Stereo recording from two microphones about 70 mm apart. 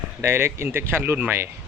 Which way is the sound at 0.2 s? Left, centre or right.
Right.